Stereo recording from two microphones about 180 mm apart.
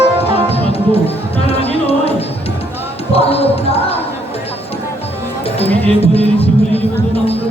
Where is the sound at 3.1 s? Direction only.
35° left (ahead or behind).